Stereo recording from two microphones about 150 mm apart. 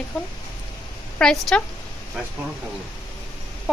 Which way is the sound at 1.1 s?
5° left (ahead or behind).